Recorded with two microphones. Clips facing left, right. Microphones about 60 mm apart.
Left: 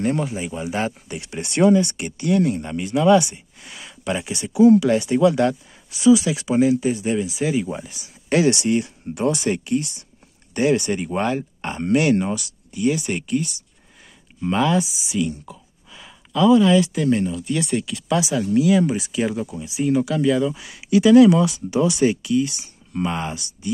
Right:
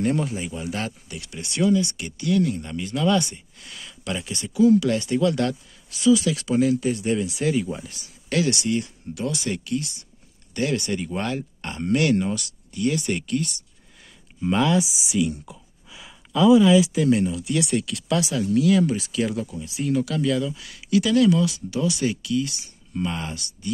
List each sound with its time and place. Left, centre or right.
0.0 s speech: centre
8.3 s speech: left